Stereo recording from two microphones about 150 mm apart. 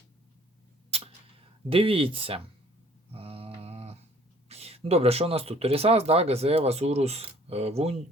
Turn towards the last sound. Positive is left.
turn(degrees=-45)  # may be behind; listen again after turning